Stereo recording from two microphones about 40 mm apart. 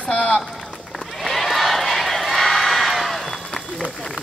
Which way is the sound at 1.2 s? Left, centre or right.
Centre.